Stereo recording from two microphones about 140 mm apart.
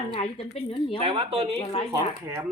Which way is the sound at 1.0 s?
45° right (ahead or behind).